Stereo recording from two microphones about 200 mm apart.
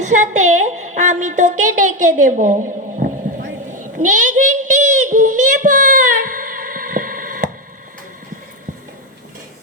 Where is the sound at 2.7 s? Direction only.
40° right (ahead or behind).